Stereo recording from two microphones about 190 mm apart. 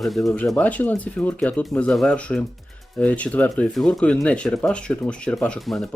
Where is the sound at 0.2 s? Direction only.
15° left (ahead or behind).